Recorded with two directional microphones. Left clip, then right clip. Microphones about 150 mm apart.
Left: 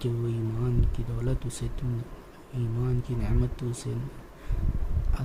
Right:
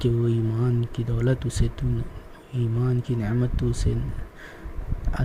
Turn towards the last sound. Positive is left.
turn(degrees=-20)  # may be behind; listen again after turning